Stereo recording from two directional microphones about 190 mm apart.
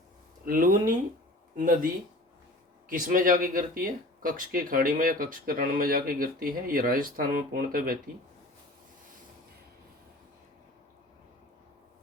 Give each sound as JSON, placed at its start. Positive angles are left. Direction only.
{"t": 0.4, "sound": "speech", "side_deg": -45}
{"t": 2.9, "sound": "speech", "side_deg": -45}